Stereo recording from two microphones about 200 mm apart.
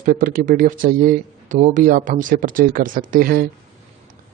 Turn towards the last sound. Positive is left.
turn(degrees=-45)  # may be behind; listen again after turning